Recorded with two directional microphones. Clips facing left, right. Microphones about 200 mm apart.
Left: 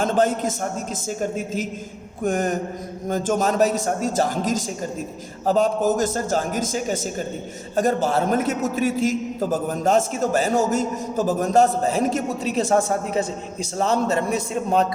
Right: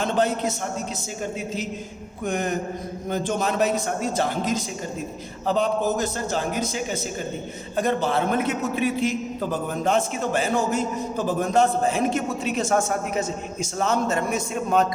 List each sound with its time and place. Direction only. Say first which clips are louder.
0.0 s a man's voice: left 3 dB; 45° left (ahead or behind)
2.2 s a man's voice: left 3 dB; 45° left (ahead or behind)